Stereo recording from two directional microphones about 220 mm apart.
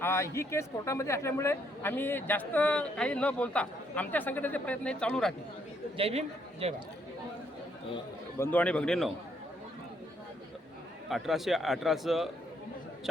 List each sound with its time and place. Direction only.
0.0 s a man's voice: 10° left (ahead or behind)
6.0 s a man's voice: 25° right (ahead or behind)
8.4 s a man's voice: 10° left (ahead or behind)
11.1 s a man's voice: centre (ahead or behind)